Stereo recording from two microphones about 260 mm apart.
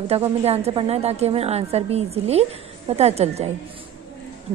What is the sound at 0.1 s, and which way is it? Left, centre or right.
A woman's voice, right.